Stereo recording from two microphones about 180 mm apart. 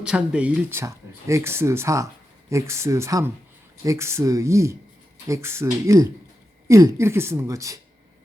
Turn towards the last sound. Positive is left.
turn(degrees=-20)  # may be behind; listen again after turning